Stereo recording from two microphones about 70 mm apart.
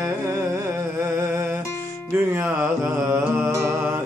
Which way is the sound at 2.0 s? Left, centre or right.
Right.